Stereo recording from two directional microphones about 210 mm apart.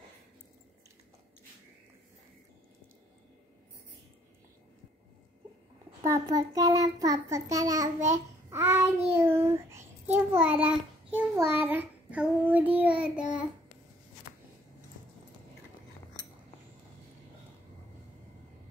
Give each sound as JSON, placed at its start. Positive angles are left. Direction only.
{"t": 6.0, "sound": "child singing", "side_deg": -15}
{"t": 9.4, "sound": "a sound", "side_deg": -15}
{"t": 10.1, "sound": "child singing", "side_deg": -10}